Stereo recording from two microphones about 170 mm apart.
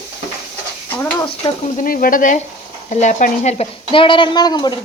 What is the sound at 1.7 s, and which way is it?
Speech, 55° left (ahead or behind).